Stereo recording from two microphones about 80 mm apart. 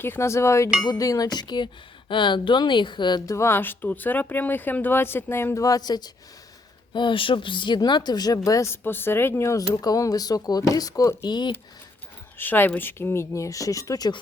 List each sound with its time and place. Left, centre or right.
0.0 s speech: left
3.2 s speech: left
5.5 s speech: left
6.9 s speech: left
7.8 s speech: left
8.4 s speech: left
8.7 s speech: left
9.8 s speech: left
11.2 s speech: left
12.4 s speech: left